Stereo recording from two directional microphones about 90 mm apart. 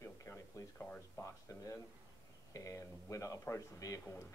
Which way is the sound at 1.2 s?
35° left (ahead or behind).